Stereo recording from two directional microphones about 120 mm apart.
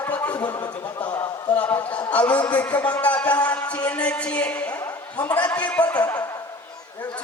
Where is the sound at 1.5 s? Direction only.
15° left (ahead or behind).